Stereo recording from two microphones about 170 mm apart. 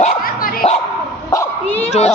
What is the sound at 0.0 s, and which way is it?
Dog, 55° left (ahead or behind).